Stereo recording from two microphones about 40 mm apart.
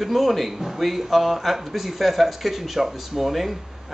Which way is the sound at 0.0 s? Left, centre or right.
Centre.